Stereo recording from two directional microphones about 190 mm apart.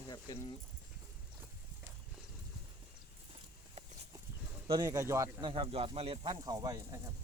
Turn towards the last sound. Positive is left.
turn(degrees=-20)  # may be behind; listen again after turning